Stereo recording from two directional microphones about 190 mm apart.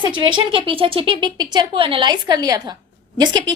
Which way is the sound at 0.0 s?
25° right (ahead or behind).